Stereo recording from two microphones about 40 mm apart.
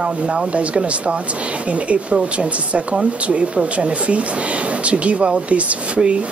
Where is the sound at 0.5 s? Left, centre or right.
Right.